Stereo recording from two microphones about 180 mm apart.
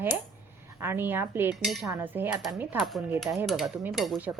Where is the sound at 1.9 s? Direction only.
10° right (ahead or behind).